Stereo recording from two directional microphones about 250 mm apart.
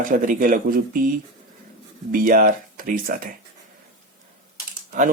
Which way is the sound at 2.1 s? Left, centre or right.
Right.